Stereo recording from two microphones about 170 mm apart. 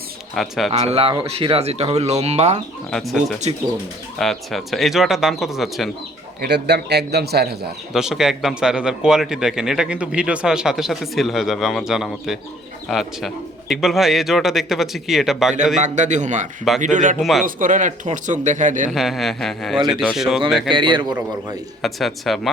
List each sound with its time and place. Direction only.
0.3 s a man's voice: centre (ahead or behind)
0.7 s speech: 40° right (ahead or behind)
2.9 s a man's voice: centre (ahead or behind)
6.4 s a man's voice: 75° right (ahead or behind)
7.9 s a man's voice: 5° right (ahead or behind)
15.5 s a man's voice: 45° right (ahead or behind)
17.2 s a man's voice: centre (ahead or behind)
17.4 s a man's voice: 50° right (ahead or behind)
18.9 s a man's voice: centre (ahead or behind)
20.7 s a man's voice: 30° right (ahead or behind)
21.8 s a man's voice: centre (ahead or behind)